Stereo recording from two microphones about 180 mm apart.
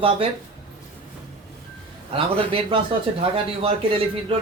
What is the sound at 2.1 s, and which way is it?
Speech, 30° right (ahead or behind).